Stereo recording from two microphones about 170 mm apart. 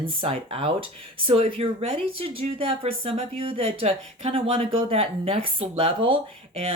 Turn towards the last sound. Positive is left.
turn(degrees=-35)  # may be behind; listen again after turning